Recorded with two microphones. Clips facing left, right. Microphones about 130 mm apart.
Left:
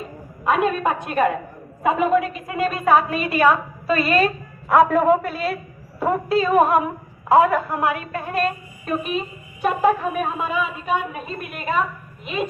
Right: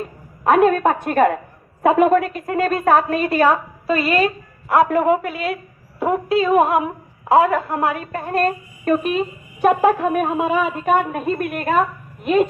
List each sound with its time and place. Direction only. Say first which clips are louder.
0.4 s a woman's voice: right 5 dB; 55° right (ahead or behind); by 3.5 s 40° right (ahead or behind)
3.8 s speech: right 1 dB; 25° right (ahead or behind)
4.8 s a woman's voice: even; 15° right (ahead or behind); by 12.5 s 55° right (ahead or behind)